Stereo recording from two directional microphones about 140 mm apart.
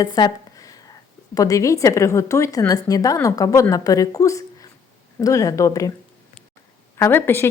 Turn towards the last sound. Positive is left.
turn(degrees=15)  # may be behind; listen again after turning